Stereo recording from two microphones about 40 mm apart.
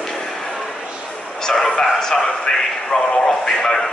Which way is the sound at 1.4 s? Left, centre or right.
Centre.